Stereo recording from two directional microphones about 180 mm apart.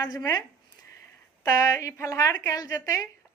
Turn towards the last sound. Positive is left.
turn(degrees=20)  # may be behind; listen again after turning